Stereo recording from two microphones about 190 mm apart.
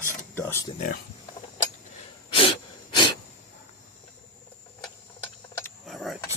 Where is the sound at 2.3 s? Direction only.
30° left (ahead or behind).